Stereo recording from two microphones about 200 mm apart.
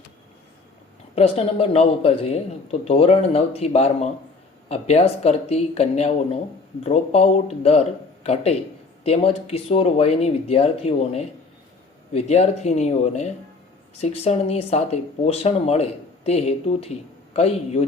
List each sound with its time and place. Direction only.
1.1 s a man's voice: 30° left (ahead or behind)